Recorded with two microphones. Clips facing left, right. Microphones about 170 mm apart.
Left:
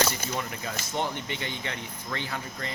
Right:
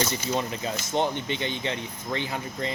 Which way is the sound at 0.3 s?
25° right (ahead or behind).